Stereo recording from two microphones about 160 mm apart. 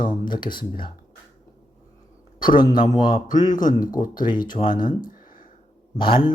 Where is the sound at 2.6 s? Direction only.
25° left (ahead or behind).